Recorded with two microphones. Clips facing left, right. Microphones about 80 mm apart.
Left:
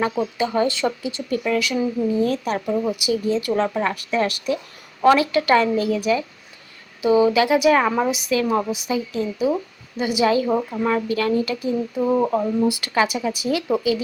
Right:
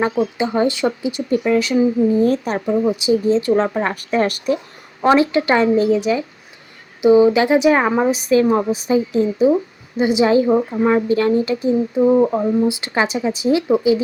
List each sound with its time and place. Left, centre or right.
0.0 s a woman's voice: right
2.6 s a woman's voice: right
5.0 s a woman's voice: right